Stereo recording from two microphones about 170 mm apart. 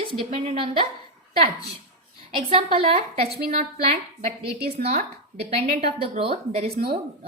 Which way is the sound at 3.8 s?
35° right (ahead or behind).